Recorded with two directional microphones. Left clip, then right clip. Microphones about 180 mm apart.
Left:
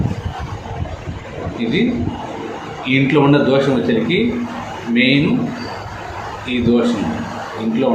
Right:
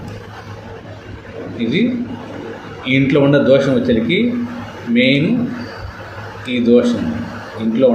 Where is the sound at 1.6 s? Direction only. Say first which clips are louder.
Right 1 dB; 40° right (ahead or behind).